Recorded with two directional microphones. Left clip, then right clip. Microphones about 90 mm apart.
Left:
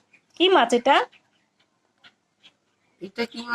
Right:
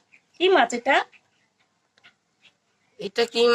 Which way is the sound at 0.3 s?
25° left (ahead or behind).